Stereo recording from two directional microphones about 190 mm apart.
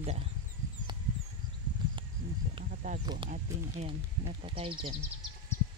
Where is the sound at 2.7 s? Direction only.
40° right (ahead or behind).